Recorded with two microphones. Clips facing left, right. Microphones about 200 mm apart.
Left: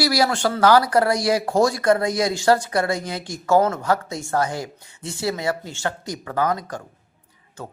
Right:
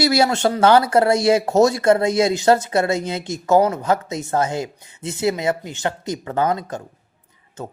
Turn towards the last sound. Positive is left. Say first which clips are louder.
# right 2 dB
turn(degrees=-25)  # may be behind; listen again after turning